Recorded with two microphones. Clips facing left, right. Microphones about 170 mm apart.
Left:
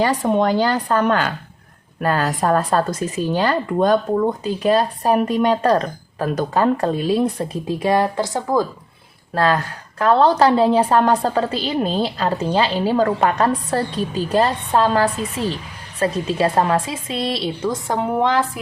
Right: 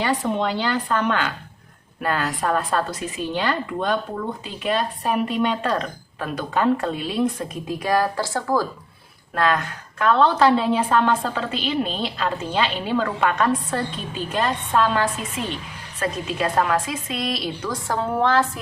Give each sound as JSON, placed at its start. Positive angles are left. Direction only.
{"t": 0.0, "sound": "speech", "side_deg": 40}
{"t": 9.3, "sound": "a woman's voice", "side_deg": 30}